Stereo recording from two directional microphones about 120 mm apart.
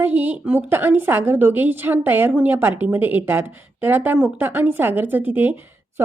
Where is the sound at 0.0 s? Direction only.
15° right (ahead or behind).